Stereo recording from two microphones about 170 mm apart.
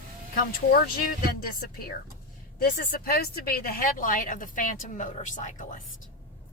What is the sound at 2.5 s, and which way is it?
Speech, 60° left (ahead or behind).